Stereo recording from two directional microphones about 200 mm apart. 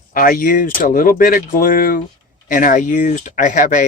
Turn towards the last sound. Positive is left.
turn(degrees=40)  # may be behind; listen again after turning